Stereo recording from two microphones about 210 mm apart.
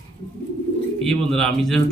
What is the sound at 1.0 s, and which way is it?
Speech, centre (ahead or behind).